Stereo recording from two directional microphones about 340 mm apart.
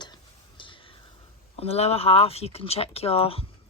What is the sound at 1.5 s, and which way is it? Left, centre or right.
Speech, centre.